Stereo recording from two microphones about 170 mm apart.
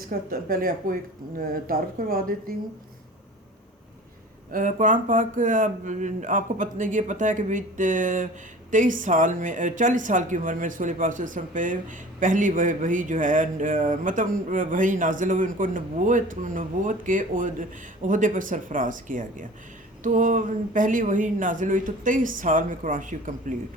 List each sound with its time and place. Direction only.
0.1 s speech: 55° right (ahead or behind)
4.5 s speech: 50° right (ahead or behind)